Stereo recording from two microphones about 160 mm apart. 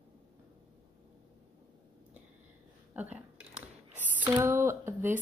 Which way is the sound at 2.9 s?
10° right (ahead or behind).